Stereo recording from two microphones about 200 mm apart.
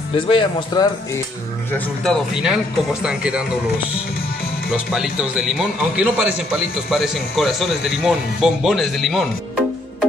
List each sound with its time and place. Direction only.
0.1 s speech: 25° left (ahead or behind)
2.0 s speech: 5° right (ahead or behind)
4.6 s speech: 5° right (ahead or behind)